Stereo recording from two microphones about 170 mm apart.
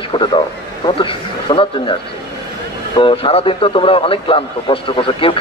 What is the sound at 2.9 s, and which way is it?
A man's voice, 30° left (ahead or behind).